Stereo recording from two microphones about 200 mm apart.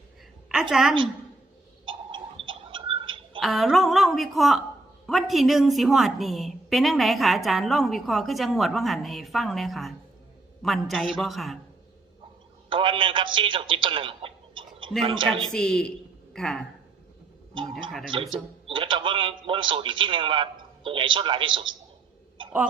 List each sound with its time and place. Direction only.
0.4 s a woman's voice: 5° right (ahead or behind)
1.8 s tick-tock: 25° right (ahead or behind)
3.4 s a woman's voice: centre (ahead or behind)
12.7 s a man's voice: 25° right (ahead or behind)
15.5 s a woman's voice: 5° left (ahead or behind)
17.5 s a man's voice: 25° right (ahead or behind)